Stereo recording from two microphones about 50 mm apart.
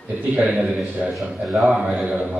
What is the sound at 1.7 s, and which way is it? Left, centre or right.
Speech, right.